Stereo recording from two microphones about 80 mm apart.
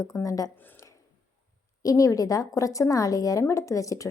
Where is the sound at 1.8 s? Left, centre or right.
Left.